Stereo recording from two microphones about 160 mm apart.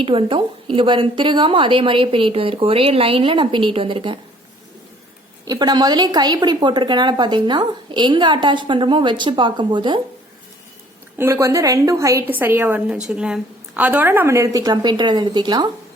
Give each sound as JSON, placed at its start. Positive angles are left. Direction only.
{"t": 0.0, "sound": "a woman's voice", "side_deg": -35}
{"t": 5.5, "sound": "a woman's voice", "side_deg": -25}
{"t": 11.2, "sound": "a woman's voice", "side_deg": -15}